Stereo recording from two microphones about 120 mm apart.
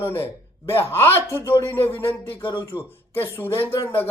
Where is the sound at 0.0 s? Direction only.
20° left (ahead or behind).